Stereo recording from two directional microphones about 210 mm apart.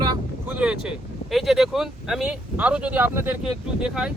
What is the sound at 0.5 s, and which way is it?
Speech, 5° right (ahead or behind).